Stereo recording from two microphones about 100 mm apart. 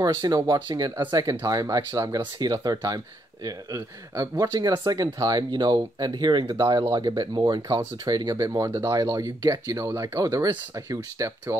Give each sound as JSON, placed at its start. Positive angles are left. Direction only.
{"t": 0.0, "sound": "speech", "side_deg": -40}
{"t": 4.1, "sound": "speech", "side_deg": -30}
{"t": 7.6, "sound": "speech", "side_deg": -35}